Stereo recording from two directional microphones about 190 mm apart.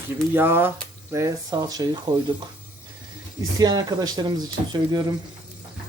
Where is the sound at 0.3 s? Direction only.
10° right (ahead or behind).